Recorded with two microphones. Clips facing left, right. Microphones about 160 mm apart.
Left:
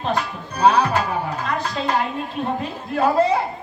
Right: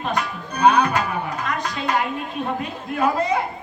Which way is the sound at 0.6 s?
30° left (ahead or behind).